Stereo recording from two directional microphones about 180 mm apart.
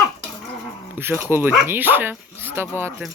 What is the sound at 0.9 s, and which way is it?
Speech, 10° right (ahead or behind).